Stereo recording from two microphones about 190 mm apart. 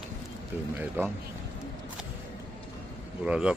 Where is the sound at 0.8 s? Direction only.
10° right (ahead or behind).